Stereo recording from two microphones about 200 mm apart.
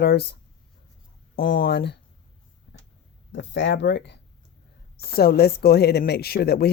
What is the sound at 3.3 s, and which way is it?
Speech, 65° left (ahead or behind).